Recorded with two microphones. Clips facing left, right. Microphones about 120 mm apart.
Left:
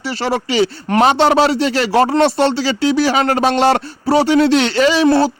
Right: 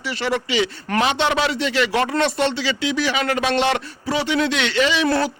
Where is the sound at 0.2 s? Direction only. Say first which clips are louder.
Left 5 dB; 35° left (ahead or behind).